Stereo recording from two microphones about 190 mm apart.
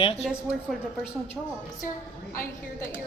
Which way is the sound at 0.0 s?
35° left (ahead or behind).